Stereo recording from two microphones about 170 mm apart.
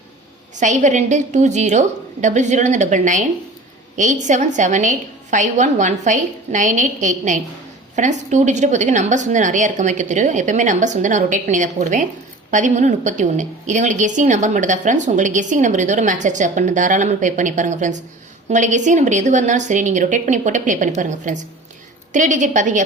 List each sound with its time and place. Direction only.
0.5 s a woman's voice: 45° right (ahead or behind)